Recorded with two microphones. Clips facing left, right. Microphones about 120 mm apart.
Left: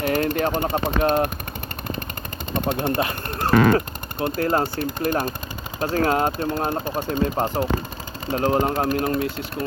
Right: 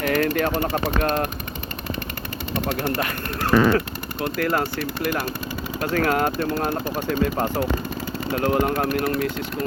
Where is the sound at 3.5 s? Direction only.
50° left (ahead or behind).